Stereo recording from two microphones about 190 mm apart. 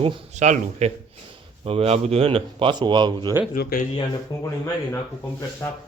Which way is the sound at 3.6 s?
55° left (ahead or behind).